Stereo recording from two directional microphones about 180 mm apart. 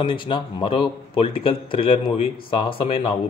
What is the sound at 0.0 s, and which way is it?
A man's voice, 25° left (ahead or behind).